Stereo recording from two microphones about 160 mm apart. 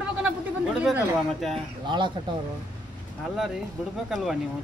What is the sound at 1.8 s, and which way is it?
Speech, 30° right (ahead or behind).